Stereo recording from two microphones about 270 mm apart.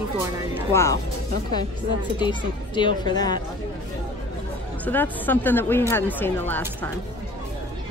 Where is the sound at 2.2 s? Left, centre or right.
Centre.